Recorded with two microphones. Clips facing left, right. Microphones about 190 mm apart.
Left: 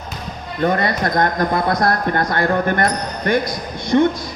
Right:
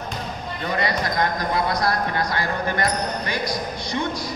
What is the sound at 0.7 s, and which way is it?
Speech, 55° left (ahead or behind).